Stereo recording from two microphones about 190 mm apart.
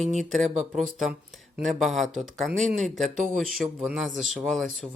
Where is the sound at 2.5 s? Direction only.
40° right (ahead or behind).